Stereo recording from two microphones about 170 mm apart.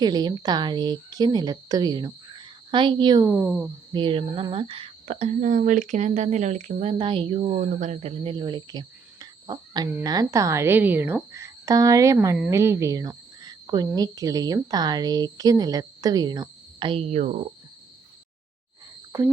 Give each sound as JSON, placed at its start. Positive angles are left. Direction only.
{"t": 0.0, "sound": "speech", "side_deg": -25}
{"t": 3.4, "sound": "speech", "side_deg": -5}
{"t": 3.9, "sound": "speech", "side_deg": -30}
{"t": 19.1, "sound": "speech", "side_deg": -20}